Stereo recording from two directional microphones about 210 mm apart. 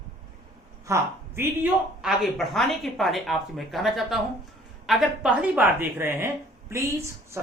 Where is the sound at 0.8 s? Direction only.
10° right (ahead or behind).